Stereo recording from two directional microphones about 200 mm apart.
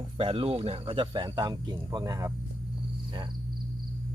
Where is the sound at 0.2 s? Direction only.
25° right (ahead or behind).